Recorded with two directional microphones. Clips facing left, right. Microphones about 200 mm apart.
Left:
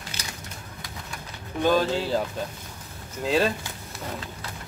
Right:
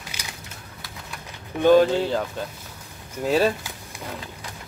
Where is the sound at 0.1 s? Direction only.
10° right (ahead or behind).